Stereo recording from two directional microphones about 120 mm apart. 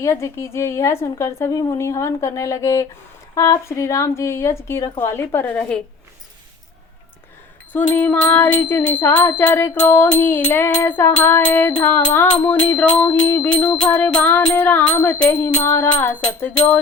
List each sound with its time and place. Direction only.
0.0 s a woman's voice: 25° left (ahead or behind)
7.7 s music: 15° left (ahead or behind)